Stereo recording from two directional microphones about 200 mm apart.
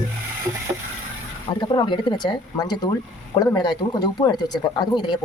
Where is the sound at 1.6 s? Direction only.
20° left (ahead or behind).